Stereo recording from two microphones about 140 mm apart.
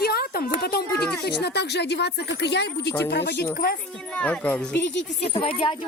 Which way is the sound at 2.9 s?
15° left (ahead or behind).